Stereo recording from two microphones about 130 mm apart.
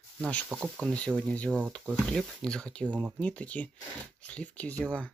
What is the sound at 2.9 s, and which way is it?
Speech, 10° right (ahead or behind).